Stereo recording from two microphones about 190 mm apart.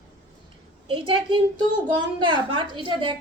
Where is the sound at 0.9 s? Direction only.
25° right (ahead or behind).